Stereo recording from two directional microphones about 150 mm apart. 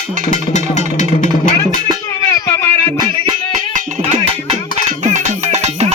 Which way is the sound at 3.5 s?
55° right (ahead or behind).